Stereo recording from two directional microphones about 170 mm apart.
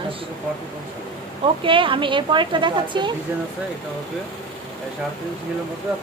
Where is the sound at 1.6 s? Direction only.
30° right (ahead or behind).